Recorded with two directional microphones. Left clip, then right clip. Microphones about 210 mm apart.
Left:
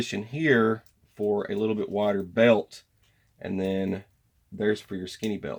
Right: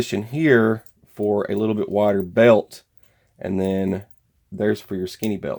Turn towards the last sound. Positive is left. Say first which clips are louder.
# right 6 dB
turn(degrees=-45)  # may be behind; listen again after turning